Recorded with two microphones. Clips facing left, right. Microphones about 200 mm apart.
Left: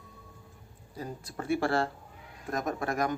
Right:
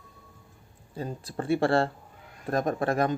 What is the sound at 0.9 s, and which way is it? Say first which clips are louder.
Speech: right 5 dB; 30° right (ahead or behind).